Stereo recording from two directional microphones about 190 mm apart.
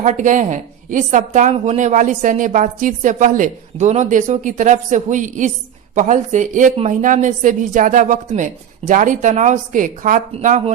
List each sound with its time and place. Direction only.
0.0 s a woman's voice: 40° right (ahead or behind)